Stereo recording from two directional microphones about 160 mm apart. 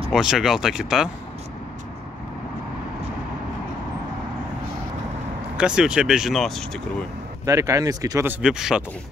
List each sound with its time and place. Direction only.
0.1 s speech: 5° right (ahead or behind)
5.6 s speech: 5° right (ahead or behind)
7.4 s speech: 20° right (ahead or behind)
8.4 s speech: 5° right (ahead or behind)